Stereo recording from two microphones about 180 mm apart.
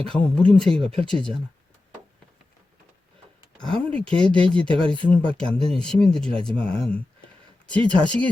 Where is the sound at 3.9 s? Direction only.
5° left (ahead or behind).